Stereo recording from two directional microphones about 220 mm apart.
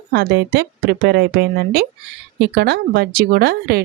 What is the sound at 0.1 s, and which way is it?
A woman's voice, 45° right (ahead or behind).